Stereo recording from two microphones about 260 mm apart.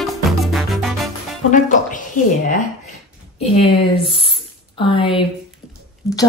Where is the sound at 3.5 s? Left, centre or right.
Left.